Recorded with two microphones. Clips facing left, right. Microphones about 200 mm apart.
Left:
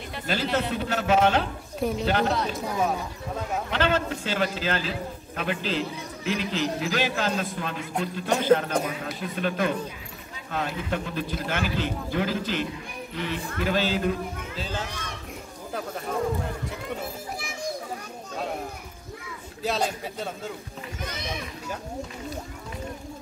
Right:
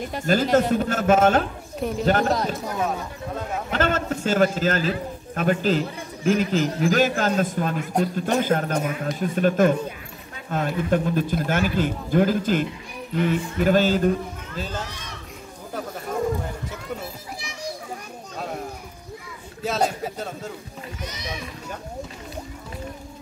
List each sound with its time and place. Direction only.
0.1 s a man's voice: 45° right (ahead or behind)
2.5 s speech: centre (ahead or behind)
3.7 s a man's voice: 45° right (ahead or behind)
19.6 s speech: centre (ahead or behind)